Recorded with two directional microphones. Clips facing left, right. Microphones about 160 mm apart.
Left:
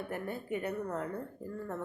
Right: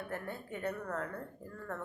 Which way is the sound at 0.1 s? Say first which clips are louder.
Left 5 dB; 15° left (ahead or behind).